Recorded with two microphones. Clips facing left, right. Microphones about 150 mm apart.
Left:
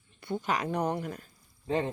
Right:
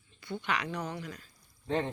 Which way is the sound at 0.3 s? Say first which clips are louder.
Left 4 dB; 45° left (ahead or behind).